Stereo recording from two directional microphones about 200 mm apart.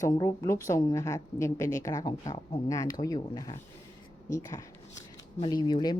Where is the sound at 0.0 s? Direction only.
20° left (ahead or behind).